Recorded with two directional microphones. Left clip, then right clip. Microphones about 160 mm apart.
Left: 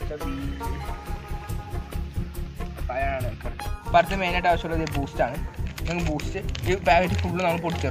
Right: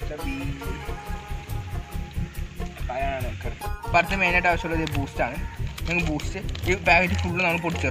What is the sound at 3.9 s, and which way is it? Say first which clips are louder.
Speech: even; 10° left (ahead or behind).